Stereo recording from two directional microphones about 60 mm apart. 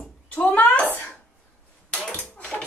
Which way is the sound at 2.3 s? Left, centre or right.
Left.